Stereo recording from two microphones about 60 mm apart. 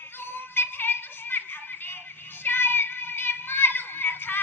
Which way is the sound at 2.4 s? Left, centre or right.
Left.